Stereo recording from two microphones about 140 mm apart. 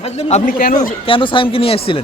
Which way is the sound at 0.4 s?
85° left.